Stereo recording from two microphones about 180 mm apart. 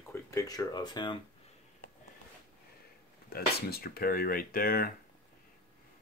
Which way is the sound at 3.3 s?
55° left (ahead or behind).